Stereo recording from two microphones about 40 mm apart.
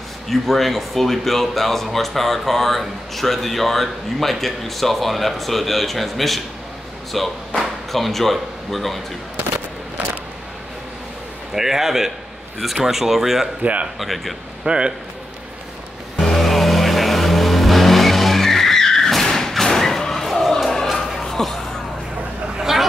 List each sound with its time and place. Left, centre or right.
0.3 s speech: centre
11.5 s speech: centre
13.6 s speech: right
13.9 s speech: centre
14.6 s speech: right
16.2 s vehicle: centre
21.2 s a sound: centre
22.6 s vehicle: centre